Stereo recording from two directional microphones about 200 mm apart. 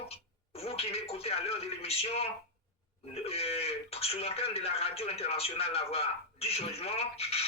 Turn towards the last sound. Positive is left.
turn(degrees=30)  # may be behind; listen again after turning